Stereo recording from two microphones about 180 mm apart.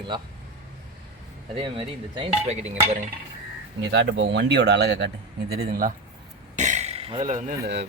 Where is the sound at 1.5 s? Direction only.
30° right (ahead or behind).